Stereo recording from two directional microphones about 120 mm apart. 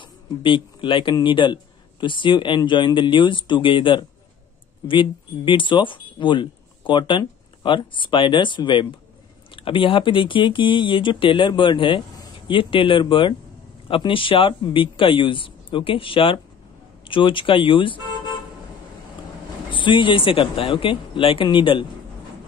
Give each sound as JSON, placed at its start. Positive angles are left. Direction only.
{"t": 0.0, "sound": "speech", "side_deg": 45}
{"t": 19.7, "sound": "speech", "side_deg": 45}